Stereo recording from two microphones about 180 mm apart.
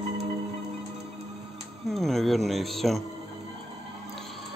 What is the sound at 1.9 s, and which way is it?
Speech, centre (ahead or behind).